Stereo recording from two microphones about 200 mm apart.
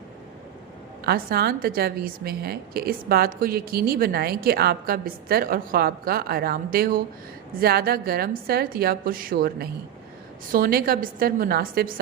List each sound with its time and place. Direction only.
1.0 s a woman's voice: 50° right (ahead or behind)